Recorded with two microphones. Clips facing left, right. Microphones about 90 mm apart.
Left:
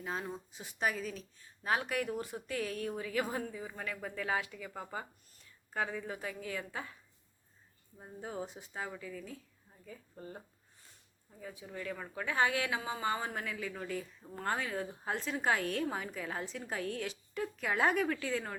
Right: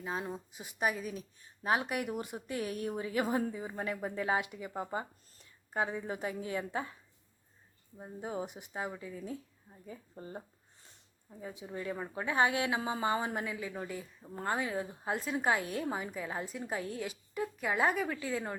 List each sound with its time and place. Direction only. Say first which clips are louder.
0.0 s a woman's voice: right 2 dB; 10° right (ahead or behind)
7.9 s a woman's voice: right 3 dB; 15° right (ahead or behind)